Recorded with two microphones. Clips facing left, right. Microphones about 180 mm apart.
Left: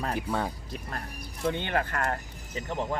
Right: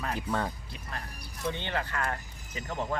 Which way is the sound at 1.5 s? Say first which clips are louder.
Left 4 dB; 55° left (ahead or behind).